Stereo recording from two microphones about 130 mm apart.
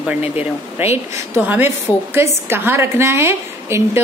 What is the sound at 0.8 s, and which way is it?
A woman's voice, 15° right (ahead or behind).